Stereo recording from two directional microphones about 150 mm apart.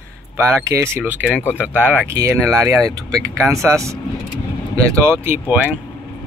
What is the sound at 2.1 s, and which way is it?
Speech, 20° right (ahead or behind).